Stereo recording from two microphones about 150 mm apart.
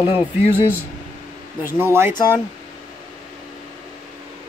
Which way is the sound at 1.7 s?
15° right (ahead or behind).